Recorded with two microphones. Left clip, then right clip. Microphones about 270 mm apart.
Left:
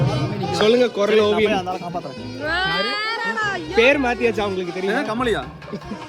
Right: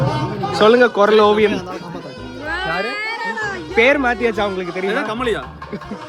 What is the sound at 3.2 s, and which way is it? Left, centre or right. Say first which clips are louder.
Cat: even; centre.